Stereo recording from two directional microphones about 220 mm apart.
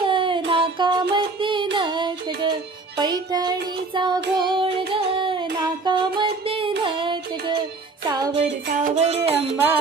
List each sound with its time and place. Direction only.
0.0 s music: 25° right (ahead or behind)
0.5 s child singing: 20° right (ahead or behind)
8.1 s music: 20° right (ahead or behind)
8.6 s music: 35° right (ahead or behind)